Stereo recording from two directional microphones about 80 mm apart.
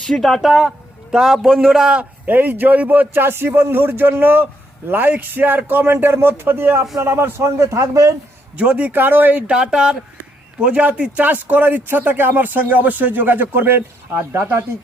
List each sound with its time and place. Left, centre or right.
0.1 s speech: centre
2.2 s a man's voice: right
8.5 s speech: centre